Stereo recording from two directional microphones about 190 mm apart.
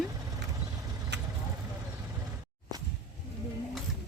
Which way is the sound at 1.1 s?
65° right (ahead or behind).